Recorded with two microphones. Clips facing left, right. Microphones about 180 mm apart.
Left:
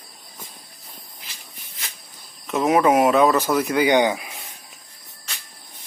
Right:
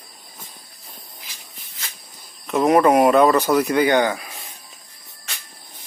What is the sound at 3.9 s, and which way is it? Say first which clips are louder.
Speech: even; 15° left (ahead or behind).